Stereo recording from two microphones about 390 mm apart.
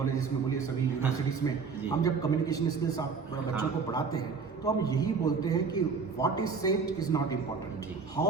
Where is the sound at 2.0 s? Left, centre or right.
Centre.